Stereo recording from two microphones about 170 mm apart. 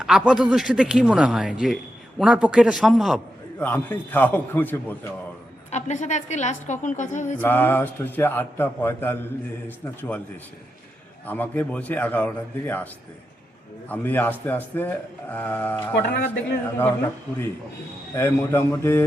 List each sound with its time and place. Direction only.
0.0 s a man's voice: 5° right (ahead or behind)
3.6 s a man's voice: 10° left (ahead or behind)
5.7 s a woman's voice: 45° left (ahead or behind)
7.4 s a man's voice: 10° left (ahead or behind)
11.3 s a man's voice: 10° left (ahead or behind)
18.1 s a man's voice: 15° left (ahead or behind)